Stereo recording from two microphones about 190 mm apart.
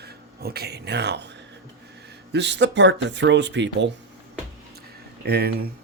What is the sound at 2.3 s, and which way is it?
Speech, 65° right (ahead or behind).